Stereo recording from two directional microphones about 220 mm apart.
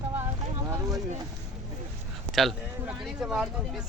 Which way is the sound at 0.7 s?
15° right (ahead or behind).